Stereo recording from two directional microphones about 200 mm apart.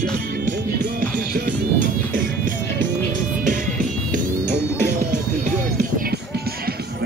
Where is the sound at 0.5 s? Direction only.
45° right (ahead or behind).